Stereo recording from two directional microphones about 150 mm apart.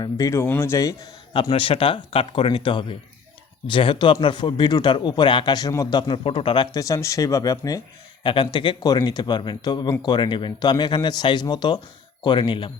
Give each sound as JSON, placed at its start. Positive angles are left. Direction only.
{"t": 0.0, "sound": "speech", "side_deg": 20}
{"t": 1.3, "sound": "speech", "side_deg": 35}
{"t": 6.7, "sound": "speech", "side_deg": 20}
{"t": 8.2, "sound": "a man's voice", "side_deg": 35}